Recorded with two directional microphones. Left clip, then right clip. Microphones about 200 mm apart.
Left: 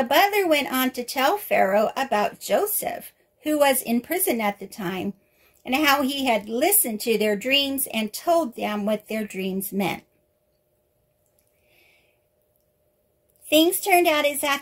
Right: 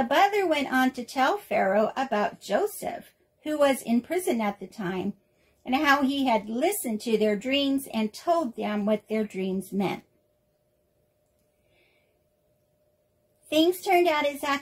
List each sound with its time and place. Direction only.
0.1 s speech: 45° left (ahead or behind)
13.5 s speech: 50° left (ahead or behind)